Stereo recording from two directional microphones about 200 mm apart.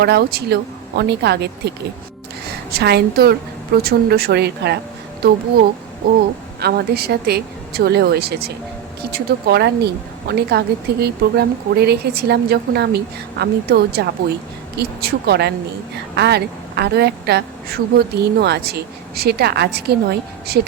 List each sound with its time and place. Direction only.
0.0 s speech: 55° right (ahead or behind)
2.7 s a woman's voice: 50° right (ahead or behind)
6.0 s a woman's voice: 55° right (ahead or behind)